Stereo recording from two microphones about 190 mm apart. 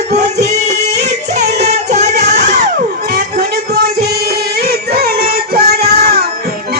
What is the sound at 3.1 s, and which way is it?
Music, 55° right (ahead or behind).